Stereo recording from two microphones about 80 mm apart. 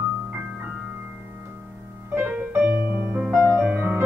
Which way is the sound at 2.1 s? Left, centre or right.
Right.